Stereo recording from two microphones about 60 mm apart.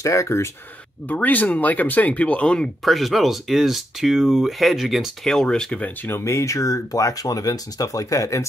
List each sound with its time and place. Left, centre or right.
0.0 s speech: left
1.0 s speech: left
2.8 s speech: centre
5.2 s speech: centre
6.2 s speech: left